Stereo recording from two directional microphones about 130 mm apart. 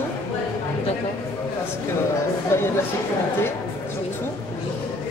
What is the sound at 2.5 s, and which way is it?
Speech, 20° left (ahead or behind).